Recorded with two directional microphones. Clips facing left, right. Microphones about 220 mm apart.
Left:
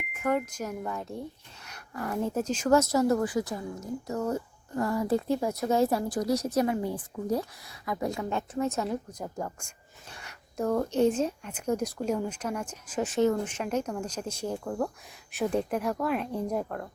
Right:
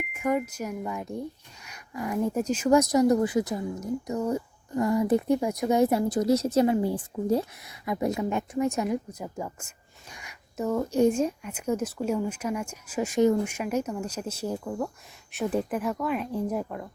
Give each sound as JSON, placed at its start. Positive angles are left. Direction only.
{"t": 0.2, "sound": "speech", "side_deg": -10}